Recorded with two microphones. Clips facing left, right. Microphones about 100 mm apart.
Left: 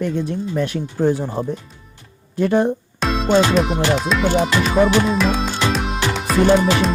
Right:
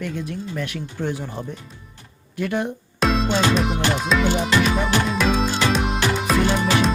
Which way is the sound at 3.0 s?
Centre (ahead or behind).